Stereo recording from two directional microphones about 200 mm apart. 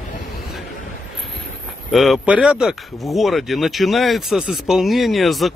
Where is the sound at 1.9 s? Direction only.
Centre (ahead or behind).